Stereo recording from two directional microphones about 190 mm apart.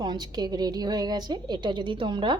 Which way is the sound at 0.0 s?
20° right (ahead or behind).